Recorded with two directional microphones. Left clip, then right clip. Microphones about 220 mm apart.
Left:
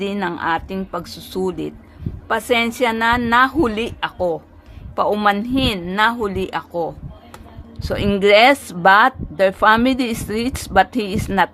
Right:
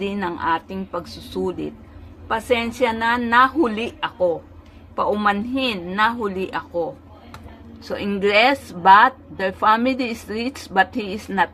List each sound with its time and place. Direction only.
0.0 s speech: 50° left (ahead or behind)
7.9 s speech: 45° left (ahead or behind)